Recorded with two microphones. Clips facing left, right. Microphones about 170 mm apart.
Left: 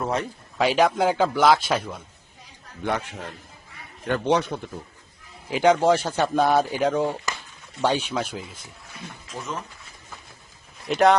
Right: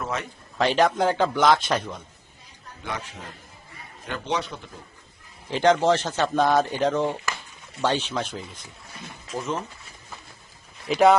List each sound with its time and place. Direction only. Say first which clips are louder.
0.0 s a man's voice: left 4 dB; 35° left (ahead or behind)
0.6 s speech: left 1 dB; 10° left (ahead or behind)
2.8 s speech: left 7 dB; 65° left (ahead or behind)
4.0 s a man's voice: left 7 dB; 55° left (ahead or behind)
5.5 s speech: left 1 dB; 10° left (ahead or behind)
9.0 s a sound: right 4 dB; 5° right (ahead or behind)
10.8 s speech: right 1 dB; centre (ahead or behind)